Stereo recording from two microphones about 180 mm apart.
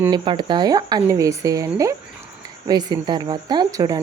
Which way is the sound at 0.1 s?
25° right (ahead or behind).